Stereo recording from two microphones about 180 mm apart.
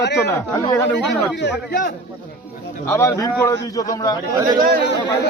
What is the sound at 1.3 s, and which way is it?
Speech, 70° left (ahead or behind).